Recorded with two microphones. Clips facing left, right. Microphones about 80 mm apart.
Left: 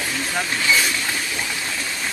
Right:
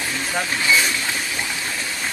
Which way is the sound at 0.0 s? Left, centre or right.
Centre.